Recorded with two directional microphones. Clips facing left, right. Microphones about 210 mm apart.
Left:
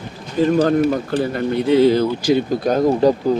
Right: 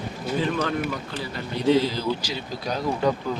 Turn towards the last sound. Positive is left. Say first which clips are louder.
# left 9 dB
turn(degrees=35)  # may be behind; listen again after turning